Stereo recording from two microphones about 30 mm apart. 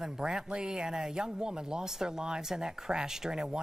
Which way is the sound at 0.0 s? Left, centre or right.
Right.